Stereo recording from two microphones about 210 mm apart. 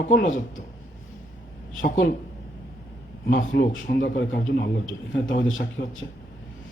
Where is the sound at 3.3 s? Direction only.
65° left (ahead or behind).